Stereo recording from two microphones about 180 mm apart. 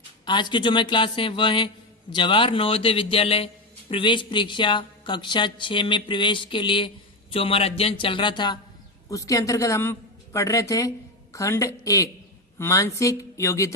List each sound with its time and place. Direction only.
0.3 s a man's voice: 25° left (ahead or behind)